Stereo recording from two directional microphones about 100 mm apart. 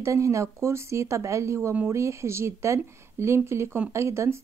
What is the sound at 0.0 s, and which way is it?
Speech, 30° right (ahead or behind).